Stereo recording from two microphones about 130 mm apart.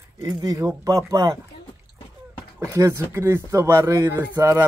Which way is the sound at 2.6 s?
25° right (ahead or behind).